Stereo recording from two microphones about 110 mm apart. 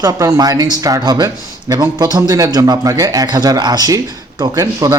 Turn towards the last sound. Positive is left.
turn(degrees=-35)  # may be behind; listen again after turning